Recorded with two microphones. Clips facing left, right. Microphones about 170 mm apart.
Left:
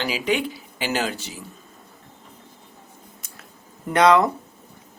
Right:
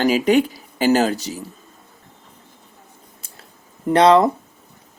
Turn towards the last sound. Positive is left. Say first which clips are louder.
# right 4 dB
turn(degrees=-30)  # may be behind; listen again after turning